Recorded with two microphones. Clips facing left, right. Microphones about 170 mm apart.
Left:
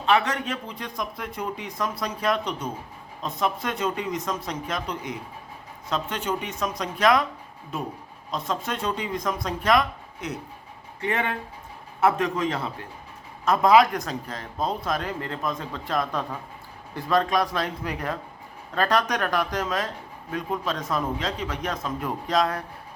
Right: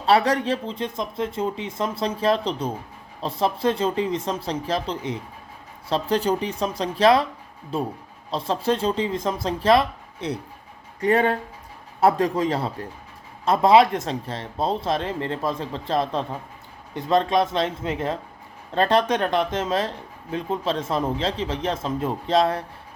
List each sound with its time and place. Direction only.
0.0 s speech: 35° right (ahead or behind)